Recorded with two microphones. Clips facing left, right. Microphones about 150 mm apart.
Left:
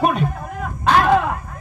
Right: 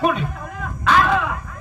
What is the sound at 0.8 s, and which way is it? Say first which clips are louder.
Crow: left 2 dB; 35° left (ahead or behind).